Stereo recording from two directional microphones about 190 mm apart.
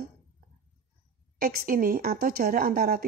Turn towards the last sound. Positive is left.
turn(degrees=-50)  # may be behind; listen again after turning